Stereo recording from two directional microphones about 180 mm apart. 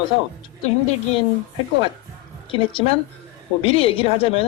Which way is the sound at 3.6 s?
30° left (ahead or behind).